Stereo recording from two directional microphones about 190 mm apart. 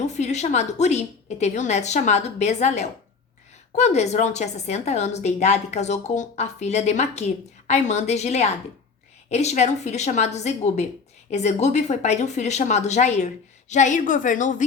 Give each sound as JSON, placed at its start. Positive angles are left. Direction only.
{"t": 0.0, "sound": "a woman's voice", "side_deg": 35}